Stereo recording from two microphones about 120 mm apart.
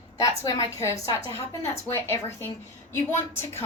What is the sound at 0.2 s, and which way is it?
A woman's voice, 30° left (ahead or behind).